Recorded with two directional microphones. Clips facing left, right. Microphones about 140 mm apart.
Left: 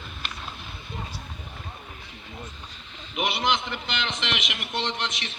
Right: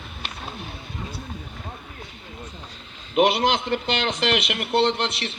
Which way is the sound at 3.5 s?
40° right (ahead or behind).